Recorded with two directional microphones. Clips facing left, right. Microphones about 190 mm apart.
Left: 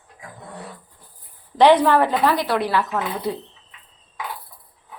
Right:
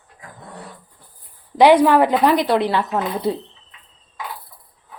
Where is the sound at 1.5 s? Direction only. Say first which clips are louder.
Right 2 dB; 10° right (ahead or behind).